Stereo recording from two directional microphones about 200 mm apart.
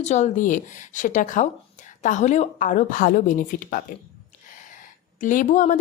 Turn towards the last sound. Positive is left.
turn(degrees=40)  # may be behind; listen again after turning